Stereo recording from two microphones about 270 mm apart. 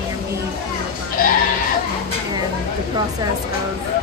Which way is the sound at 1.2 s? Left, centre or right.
Left.